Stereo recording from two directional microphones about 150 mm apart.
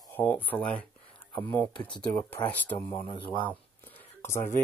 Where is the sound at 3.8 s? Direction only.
15° left (ahead or behind).